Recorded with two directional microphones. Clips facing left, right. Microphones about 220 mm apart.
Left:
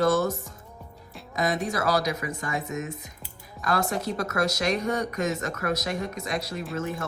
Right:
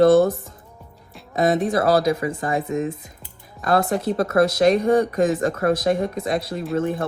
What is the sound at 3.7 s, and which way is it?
Speech, 55° right (ahead or behind).